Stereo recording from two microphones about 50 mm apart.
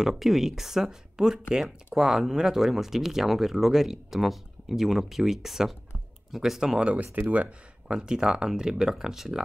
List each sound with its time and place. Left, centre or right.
0.0 s speech: centre
6.9 s speech: right
7.9 s speech: centre